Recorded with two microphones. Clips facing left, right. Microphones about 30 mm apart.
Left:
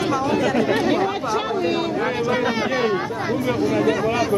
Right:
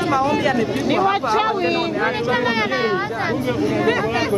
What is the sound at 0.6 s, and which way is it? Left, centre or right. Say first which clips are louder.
Speech: left 2 dB; left.